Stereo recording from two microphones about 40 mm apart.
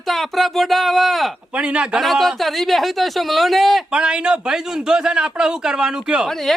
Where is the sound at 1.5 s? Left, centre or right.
Right.